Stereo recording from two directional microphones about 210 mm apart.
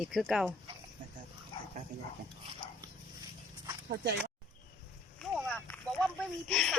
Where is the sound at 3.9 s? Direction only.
50° right (ahead or behind).